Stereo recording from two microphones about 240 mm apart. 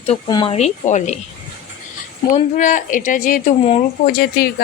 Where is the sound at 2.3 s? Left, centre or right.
Left.